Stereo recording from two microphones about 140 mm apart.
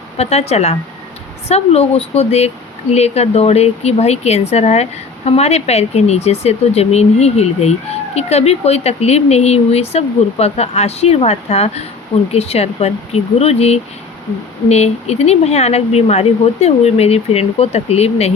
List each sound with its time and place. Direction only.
0.2 s speech: 50° left (ahead or behind)